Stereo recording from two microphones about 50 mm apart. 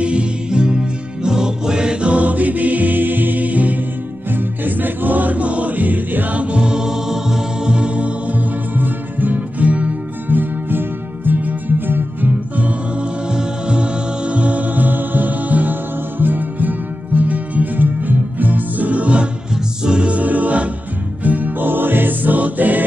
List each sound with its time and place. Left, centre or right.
0.0 s music: right
10.2 s music: right
13.3 s music: centre
19.8 s choir: centre
21.2 s music: right